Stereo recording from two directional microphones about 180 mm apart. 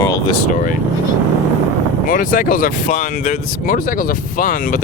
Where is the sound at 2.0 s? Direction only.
50° left (ahead or behind).